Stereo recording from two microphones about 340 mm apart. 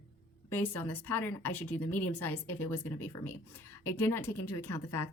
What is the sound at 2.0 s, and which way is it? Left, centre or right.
A woman's voice, left.